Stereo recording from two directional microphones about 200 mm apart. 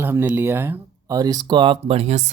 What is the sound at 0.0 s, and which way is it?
Speech, 10° right (ahead or behind).